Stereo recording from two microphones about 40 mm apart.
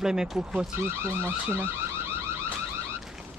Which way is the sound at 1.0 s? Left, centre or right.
Right.